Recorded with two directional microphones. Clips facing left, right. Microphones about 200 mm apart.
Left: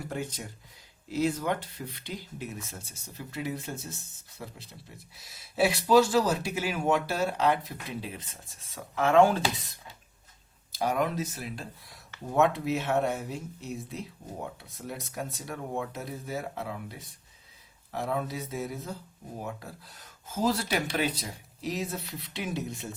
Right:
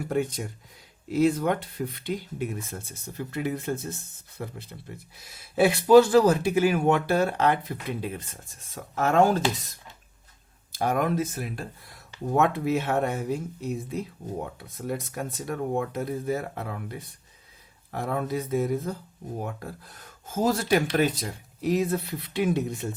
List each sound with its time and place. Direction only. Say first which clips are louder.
0.1 s speech: right 11 dB; 55° right (ahead or behind)